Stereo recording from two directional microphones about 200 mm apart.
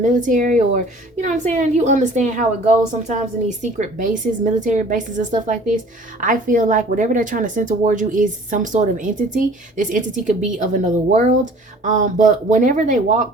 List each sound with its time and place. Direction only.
0.0 s a woman's voice: 40° right (ahead or behind)